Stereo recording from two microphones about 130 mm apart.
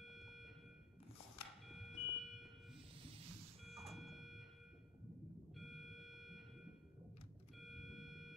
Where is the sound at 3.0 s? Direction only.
45° right (ahead or behind).